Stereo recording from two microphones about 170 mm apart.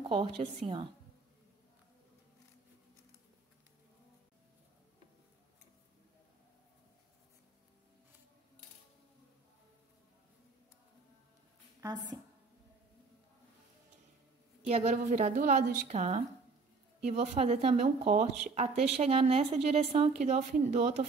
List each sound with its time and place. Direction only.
0.0 s a woman's voice: 30° right (ahead or behind)
14.7 s a woman's voice: 40° right (ahead or behind)